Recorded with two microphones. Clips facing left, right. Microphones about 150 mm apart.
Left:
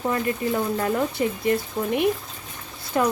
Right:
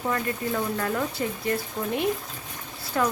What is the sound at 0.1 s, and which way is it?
Speech, 20° left (ahead or behind).